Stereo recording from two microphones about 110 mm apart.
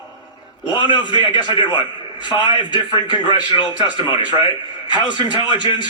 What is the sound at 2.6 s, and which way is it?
Speech, 45° left (ahead or behind).